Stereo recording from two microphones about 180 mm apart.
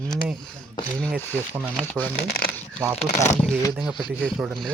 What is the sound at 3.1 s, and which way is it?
Speech, 40° left (ahead or behind).